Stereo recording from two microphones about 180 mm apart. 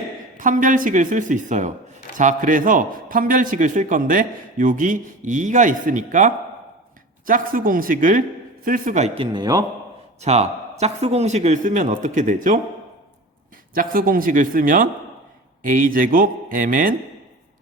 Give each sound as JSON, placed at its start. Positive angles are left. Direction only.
{"t": 0.3, "sound": "a man's voice", "side_deg": -45}
{"t": 10.2, "sound": "a man's voice", "side_deg": -35}
{"t": 13.7, "sound": "a man's voice", "side_deg": -50}